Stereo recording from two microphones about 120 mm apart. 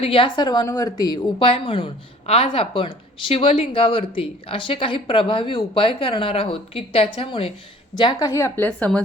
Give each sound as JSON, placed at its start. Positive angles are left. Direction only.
{"t": 0.0, "sound": "a woman's voice", "side_deg": 50}
{"t": 1.4, "sound": "a woman's voice", "side_deg": 50}
{"t": 8.3, "sound": "a woman's voice", "side_deg": 25}